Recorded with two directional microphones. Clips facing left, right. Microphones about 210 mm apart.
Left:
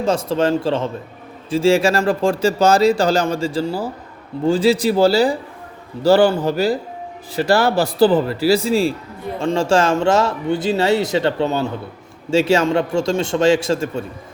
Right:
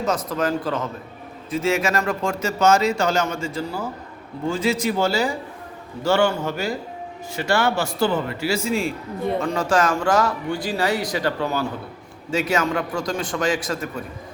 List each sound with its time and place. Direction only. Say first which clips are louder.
0.0 s a man's voice: left 5 dB; 30° left (ahead or behind)